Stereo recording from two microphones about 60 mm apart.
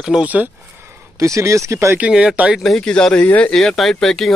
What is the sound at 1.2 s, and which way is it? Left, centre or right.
Speech, right.